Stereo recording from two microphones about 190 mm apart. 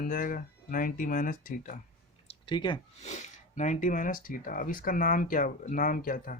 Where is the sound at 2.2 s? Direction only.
25° left (ahead or behind).